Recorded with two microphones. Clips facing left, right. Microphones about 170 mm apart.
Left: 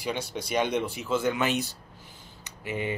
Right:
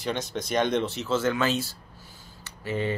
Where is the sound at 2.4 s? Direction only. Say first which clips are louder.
Right 3 dB; 15° left (ahead or behind).